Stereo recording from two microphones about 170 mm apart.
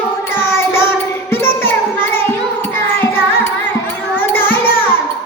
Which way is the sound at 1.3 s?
15° left (ahead or behind).